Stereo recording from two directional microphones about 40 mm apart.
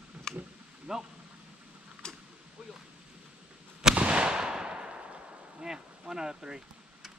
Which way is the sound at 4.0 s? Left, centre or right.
Right.